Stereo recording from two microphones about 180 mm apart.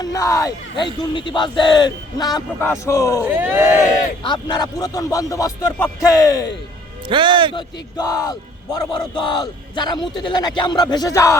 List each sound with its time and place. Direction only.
0.0 s speech: 20° left (ahead or behind)
3.2 s speech: 10° right (ahead or behind)
4.2 s speech: 25° left (ahead or behind)
7.1 s a man's voice: 25° right (ahead or behind)
7.5 s speech: 20° left (ahead or behind)